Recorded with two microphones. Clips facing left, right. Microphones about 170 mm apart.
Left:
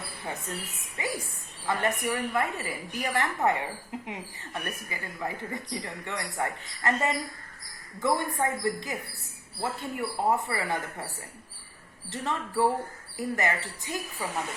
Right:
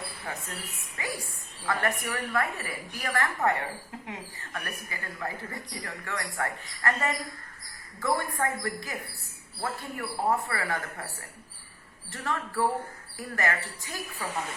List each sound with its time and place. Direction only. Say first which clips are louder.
0.3 s a woman's voice: left 5 dB; 20° left (ahead or behind)
12.1 s a woman's voice: left 2 dB; 20° left (ahead or behind)